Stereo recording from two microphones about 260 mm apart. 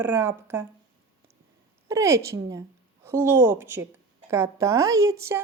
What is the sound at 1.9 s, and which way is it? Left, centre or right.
Speech, centre.